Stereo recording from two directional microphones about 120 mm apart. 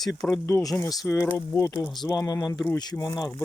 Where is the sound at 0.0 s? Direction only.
Centre (ahead or behind).